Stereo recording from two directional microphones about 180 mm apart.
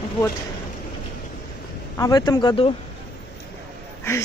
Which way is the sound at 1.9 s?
20° left (ahead or behind).